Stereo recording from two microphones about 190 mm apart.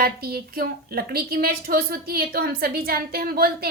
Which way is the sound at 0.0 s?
55° right (ahead or behind).